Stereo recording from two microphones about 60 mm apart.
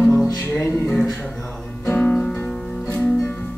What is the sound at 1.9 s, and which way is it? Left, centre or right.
Music, left.